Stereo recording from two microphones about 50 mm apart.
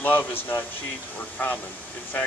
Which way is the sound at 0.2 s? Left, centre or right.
Left.